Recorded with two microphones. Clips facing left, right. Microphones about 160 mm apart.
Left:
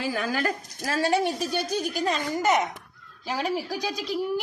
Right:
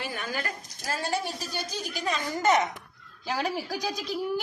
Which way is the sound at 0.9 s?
75° left (ahead or behind).